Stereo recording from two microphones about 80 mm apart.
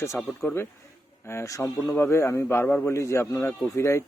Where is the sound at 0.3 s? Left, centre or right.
Left.